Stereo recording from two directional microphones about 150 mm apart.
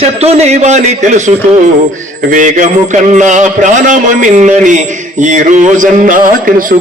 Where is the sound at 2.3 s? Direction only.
55° right (ahead or behind).